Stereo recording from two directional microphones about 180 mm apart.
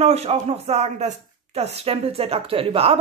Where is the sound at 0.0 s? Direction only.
35° right (ahead or behind).